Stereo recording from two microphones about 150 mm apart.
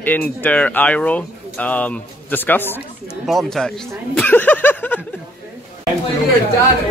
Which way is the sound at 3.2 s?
Centre (ahead or behind).